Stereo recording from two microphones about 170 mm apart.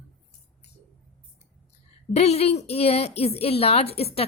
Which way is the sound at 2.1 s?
40° left (ahead or behind).